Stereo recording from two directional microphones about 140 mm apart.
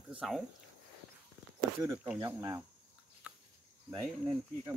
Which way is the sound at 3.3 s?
10° right (ahead or behind).